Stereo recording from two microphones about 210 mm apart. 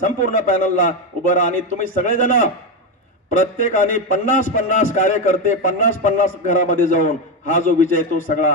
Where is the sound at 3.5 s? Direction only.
40° left (ahead or behind).